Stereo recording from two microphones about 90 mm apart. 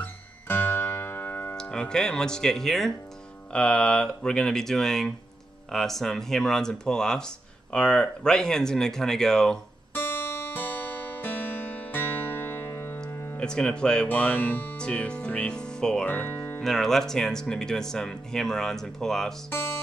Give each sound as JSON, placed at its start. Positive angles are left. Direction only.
{"t": 0.0, "sound": "music", "side_deg": 25}
{"t": 1.6, "sound": "speech", "side_deg": 10}
{"t": 9.9, "sound": "music", "side_deg": 25}
{"t": 13.4, "sound": "speech", "side_deg": 10}
{"t": 16.1, "sound": "music", "side_deg": 20}
{"t": 16.6, "sound": "speech", "side_deg": 5}
{"t": 19.5, "sound": "music", "side_deg": 25}